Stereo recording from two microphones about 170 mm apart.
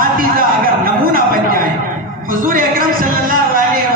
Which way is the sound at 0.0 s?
55° right (ahead or behind).